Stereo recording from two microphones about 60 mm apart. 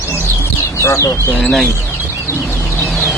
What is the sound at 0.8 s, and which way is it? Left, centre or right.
Speech, left.